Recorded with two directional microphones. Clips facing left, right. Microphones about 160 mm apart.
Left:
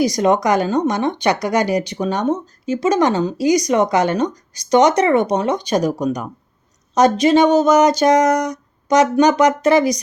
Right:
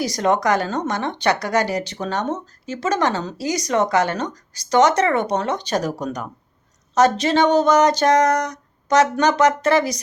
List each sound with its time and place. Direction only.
0.0 s a woman's voice: 15° left (ahead or behind)